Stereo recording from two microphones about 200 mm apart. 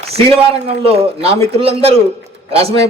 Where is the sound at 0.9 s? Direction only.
30° right (ahead or behind).